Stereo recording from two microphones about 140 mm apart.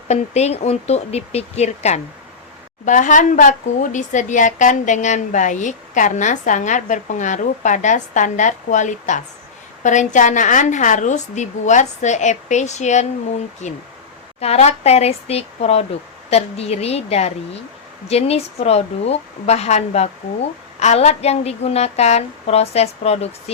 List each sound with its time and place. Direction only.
0.1 s a woman's voice: 50° left (ahead or behind)
2.8 s a woman's voice: 65° left (ahead or behind); by 23.3 s 50° left (ahead or behind)